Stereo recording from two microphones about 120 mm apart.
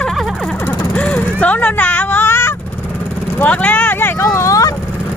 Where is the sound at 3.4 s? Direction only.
10° left (ahead or behind).